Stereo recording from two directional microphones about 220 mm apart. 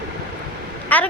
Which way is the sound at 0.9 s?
5° left (ahead or behind).